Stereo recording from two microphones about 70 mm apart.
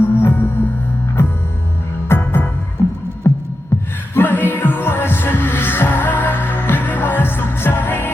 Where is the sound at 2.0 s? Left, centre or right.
Left.